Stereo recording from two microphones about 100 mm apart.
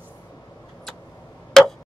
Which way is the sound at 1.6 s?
5° left (ahead or behind).